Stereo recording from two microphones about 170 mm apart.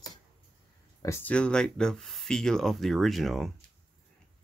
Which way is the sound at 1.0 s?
15° left (ahead or behind).